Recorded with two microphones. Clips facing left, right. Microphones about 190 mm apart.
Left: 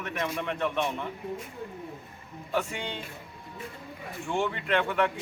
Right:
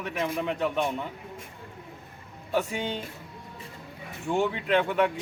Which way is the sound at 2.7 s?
40° right (ahead or behind).